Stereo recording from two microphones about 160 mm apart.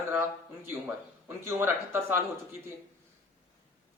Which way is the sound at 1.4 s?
15° right (ahead or behind).